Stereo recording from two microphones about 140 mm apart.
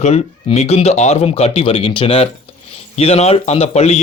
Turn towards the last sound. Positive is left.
turn(degrees=50)  # may be behind; listen again after turning